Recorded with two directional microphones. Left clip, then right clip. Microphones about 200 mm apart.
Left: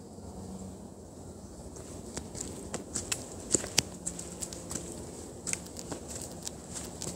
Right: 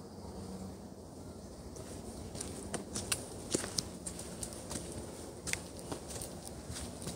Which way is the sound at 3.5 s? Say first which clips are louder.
Left 5 dB; 10° left (ahead or behind).